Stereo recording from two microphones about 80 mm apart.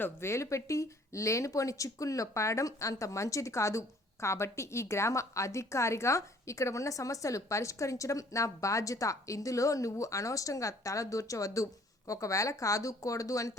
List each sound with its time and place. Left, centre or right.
0.0 s speech: left